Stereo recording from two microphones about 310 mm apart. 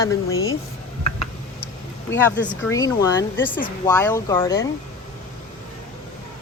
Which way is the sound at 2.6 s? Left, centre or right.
Centre.